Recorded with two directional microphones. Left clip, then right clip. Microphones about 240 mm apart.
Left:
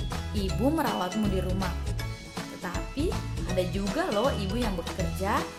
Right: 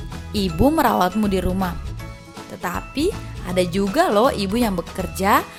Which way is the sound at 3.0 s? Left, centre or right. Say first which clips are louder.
Right 9 dB; right.